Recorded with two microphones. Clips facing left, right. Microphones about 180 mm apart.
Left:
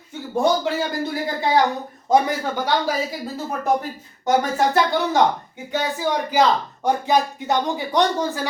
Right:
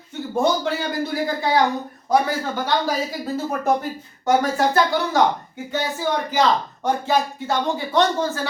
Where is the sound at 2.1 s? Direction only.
15° left (ahead or behind).